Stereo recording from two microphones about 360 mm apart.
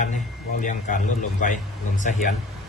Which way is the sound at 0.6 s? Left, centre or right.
Left.